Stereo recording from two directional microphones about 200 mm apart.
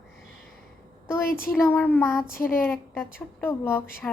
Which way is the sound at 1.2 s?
45° left (ahead or behind).